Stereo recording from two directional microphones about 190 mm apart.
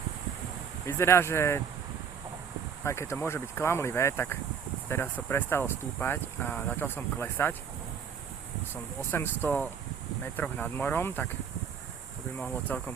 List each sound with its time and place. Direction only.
0.9 s speech: 15° left (ahead or behind)
2.8 s speech: 15° left (ahead or behind)
8.7 s speech: 10° left (ahead or behind)
12.4 s speech: 5° left (ahead or behind)